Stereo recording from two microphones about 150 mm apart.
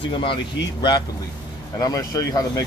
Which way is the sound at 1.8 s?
25° left (ahead or behind).